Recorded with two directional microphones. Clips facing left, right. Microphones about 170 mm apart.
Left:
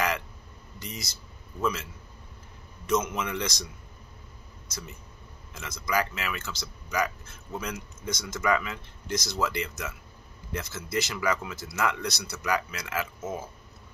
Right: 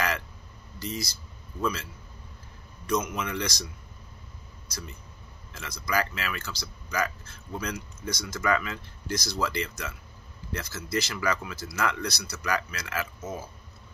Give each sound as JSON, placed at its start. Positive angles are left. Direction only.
{"t": 0.7, "sound": "speech", "side_deg": 20}
{"t": 2.9, "sound": "speech", "side_deg": 25}
{"t": 4.6, "sound": "speech", "side_deg": 25}